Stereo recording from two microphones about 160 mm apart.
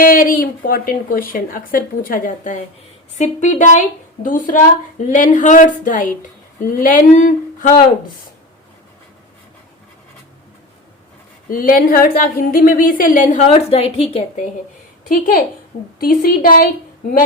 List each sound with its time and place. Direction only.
0.0 s a woman's voice: 65° left (ahead or behind)
11.4 s a woman's voice: 60° left (ahead or behind); by 14.3 s 35° left (ahead or behind)
15.1 s a woman's voice: 65° left (ahead or behind)